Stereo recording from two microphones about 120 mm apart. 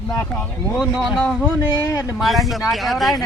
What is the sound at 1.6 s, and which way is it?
Speech, 30° left (ahead or behind).